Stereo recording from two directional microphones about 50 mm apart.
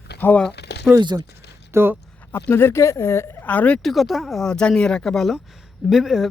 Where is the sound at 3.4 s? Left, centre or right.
Left.